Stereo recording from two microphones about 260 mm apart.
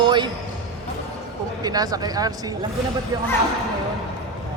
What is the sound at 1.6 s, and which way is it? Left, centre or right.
Speech, centre.